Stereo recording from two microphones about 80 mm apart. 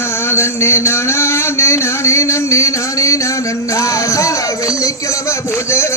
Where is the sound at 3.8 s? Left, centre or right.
Left.